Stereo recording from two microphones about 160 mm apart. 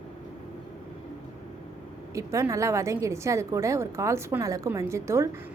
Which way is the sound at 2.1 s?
20° right (ahead or behind).